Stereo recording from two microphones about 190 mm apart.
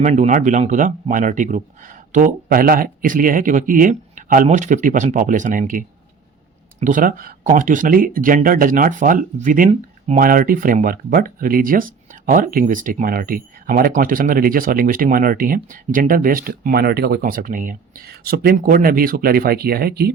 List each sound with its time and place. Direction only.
0.0 s speech: 40° right (ahead or behind); by 20.1 s 55° right (ahead or behind)